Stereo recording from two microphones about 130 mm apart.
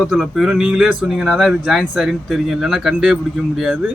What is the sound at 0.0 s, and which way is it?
Speech, centre (ahead or behind).